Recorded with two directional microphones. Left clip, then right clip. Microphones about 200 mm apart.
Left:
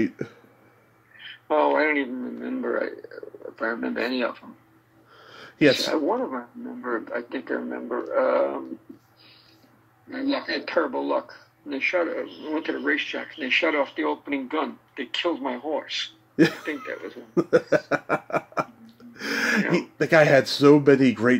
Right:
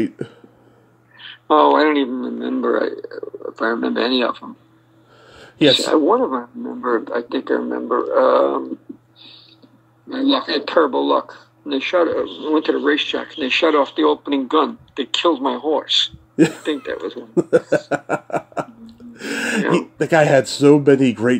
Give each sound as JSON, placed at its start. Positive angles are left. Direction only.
{"t": 1.1, "sound": "speech", "side_deg": -10}
{"t": 6.9, "sound": "speech", "side_deg": -10}
{"t": 10.0, "sound": "a man's voice", "side_deg": -10}